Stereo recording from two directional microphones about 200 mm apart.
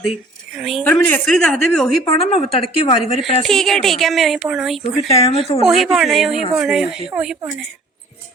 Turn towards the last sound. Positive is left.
turn(degrees=-5)  # may be behind; listen again after turning